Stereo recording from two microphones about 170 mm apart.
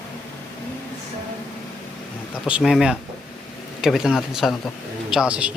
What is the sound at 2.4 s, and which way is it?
Speech, 5° right (ahead or behind).